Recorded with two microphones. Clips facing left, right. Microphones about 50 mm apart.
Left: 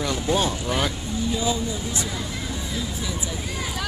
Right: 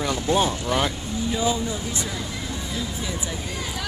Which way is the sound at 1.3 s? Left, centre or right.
Centre.